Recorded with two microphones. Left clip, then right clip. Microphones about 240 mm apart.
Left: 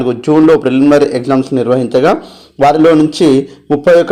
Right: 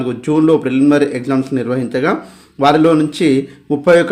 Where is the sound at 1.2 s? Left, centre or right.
Centre.